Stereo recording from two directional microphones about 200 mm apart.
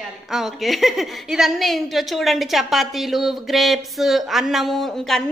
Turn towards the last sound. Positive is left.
turn(degrees=0)  # may be behind; listen again after turning